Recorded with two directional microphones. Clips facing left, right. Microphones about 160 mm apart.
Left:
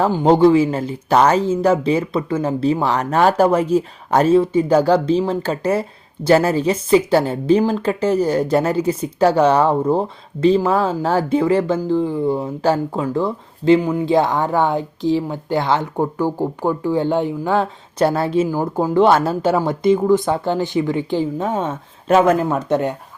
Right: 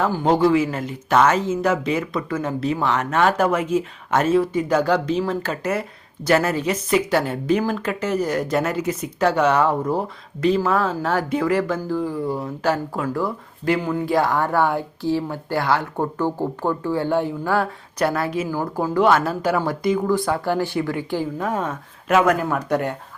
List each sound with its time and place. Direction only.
0.3 s speech: 30° left (ahead or behind)
18.4 s speech: 15° left (ahead or behind)